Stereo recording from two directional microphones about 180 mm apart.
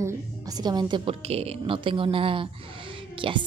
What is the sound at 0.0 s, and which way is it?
A woman's voice, 20° right (ahead or behind).